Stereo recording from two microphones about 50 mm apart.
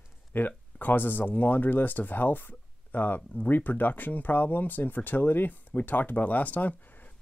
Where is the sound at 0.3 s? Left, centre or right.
Left.